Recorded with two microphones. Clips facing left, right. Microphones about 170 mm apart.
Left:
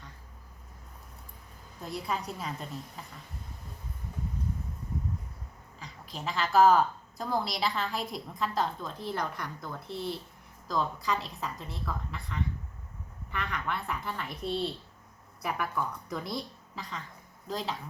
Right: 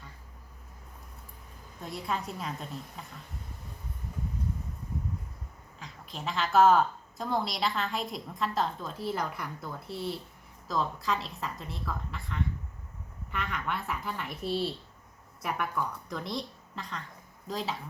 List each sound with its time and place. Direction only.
1.8 s a woman's voice: centre (ahead or behind)
5.8 s a woman's voice: centre (ahead or behind)